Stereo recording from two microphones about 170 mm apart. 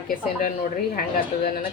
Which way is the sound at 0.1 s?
55° left (ahead or behind).